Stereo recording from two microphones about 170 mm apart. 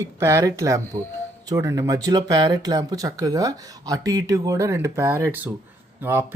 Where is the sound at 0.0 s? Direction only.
15° right (ahead or behind).